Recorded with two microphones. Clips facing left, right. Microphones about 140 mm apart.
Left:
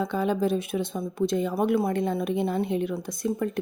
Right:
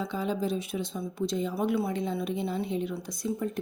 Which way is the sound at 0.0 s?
60° left (ahead or behind).